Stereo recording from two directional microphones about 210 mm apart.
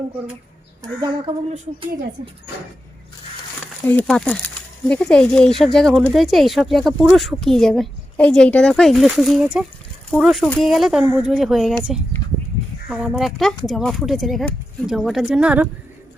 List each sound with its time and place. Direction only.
0.8 s a woman's voice: 20° right (ahead or behind)
3.8 s speech: 5° left (ahead or behind)